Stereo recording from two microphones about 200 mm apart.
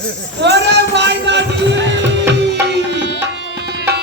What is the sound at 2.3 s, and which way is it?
Tabla, 60° right (ahead or behind).